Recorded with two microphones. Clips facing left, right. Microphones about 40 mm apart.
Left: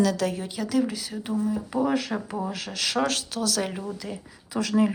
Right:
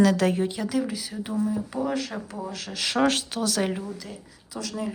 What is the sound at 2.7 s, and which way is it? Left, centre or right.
Speech, centre.